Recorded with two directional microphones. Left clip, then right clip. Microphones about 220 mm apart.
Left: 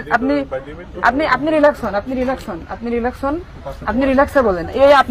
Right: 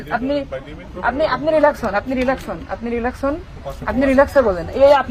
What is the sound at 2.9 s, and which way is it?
A man's voice, 35° left (ahead or behind).